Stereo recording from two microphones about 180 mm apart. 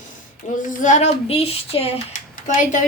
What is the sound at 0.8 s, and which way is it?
A woman's voice, 40° left (ahead or behind).